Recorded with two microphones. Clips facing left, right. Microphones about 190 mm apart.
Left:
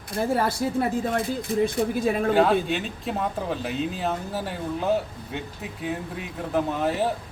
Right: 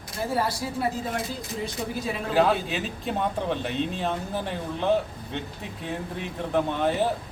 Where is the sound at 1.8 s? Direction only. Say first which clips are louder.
Left 7 dB; 55° left (ahead or behind).